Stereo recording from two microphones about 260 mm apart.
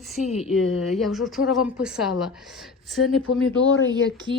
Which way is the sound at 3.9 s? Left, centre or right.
Centre.